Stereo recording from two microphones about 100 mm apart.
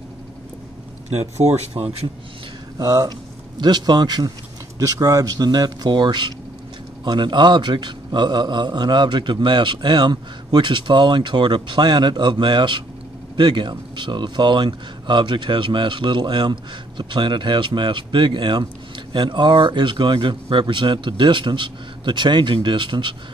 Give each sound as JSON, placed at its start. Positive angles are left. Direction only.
{"t": 1.1, "sound": "speech", "side_deg": -90}
{"t": 2.8, "sound": "speech", "side_deg": -40}